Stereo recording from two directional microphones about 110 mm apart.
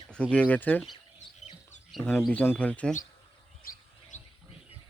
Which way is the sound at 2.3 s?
15° left (ahead or behind).